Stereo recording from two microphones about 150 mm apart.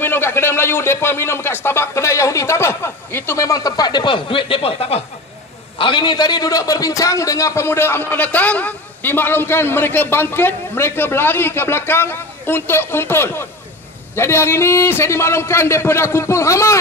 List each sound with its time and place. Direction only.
0.0 s a man's voice: 15° left (ahead or behind)